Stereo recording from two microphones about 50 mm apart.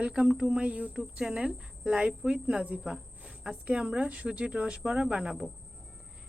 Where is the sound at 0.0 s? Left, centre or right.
Centre.